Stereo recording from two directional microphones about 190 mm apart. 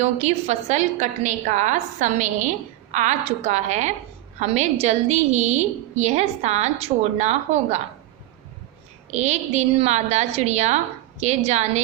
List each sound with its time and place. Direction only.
0.0 s a woman's voice: 35° right (ahead or behind)
9.0 s a woman's voice: 35° right (ahead or behind)